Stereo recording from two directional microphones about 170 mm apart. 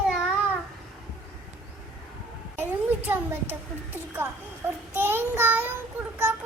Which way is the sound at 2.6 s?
10° right (ahead or behind).